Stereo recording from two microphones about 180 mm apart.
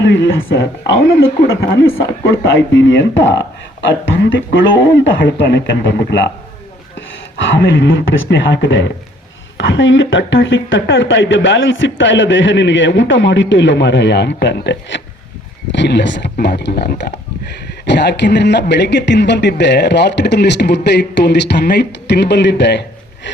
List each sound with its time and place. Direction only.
0.0 s speech: 90° left
7.3 s speech: 90° left; by 22.8 s 75° left (ahead or behind)